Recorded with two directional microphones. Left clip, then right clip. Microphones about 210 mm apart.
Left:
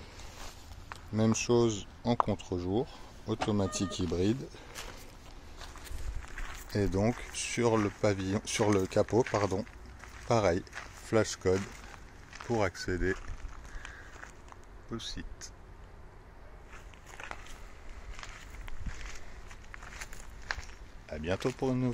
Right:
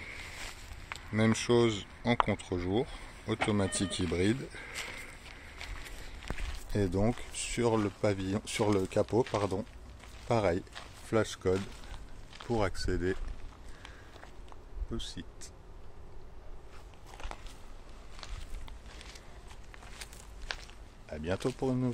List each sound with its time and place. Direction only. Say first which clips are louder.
1.1 s speech: even; 5° left (ahead or behind)
6.7 s speech: left 1 dB; 5° left (ahead or behind)
15.0 s speech: left 2 dB; 20° right (ahead or behind)
19.7 s walk: left 3 dB; centre (ahead or behind)
21.1 s speech: left 1 dB; 5° left (ahead or behind)